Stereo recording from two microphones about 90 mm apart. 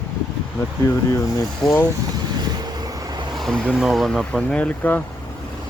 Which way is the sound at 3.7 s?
Centre (ahead or behind).